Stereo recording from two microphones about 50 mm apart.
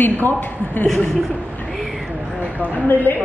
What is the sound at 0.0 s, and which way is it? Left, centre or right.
Speech, left.